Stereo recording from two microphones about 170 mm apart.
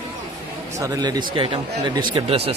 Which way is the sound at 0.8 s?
20° right (ahead or behind).